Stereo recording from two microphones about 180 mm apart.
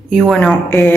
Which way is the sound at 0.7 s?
15° left (ahead or behind).